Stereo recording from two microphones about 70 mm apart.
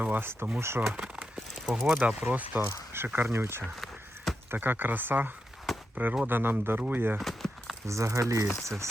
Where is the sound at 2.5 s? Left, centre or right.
Right.